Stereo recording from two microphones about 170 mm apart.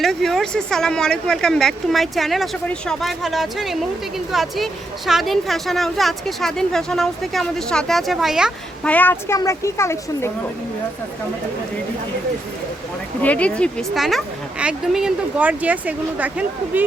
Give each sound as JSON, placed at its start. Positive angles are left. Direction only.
{"t": 0.0, "sound": "speech", "side_deg": 0}
{"t": 8.9, "sound": "a woman's voice", "side_deg": 10}
{"t": 13.2, "sound": "speech", "side_deg": 10}